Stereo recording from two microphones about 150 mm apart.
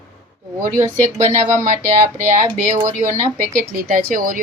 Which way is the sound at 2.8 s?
60° right (ahead or behind).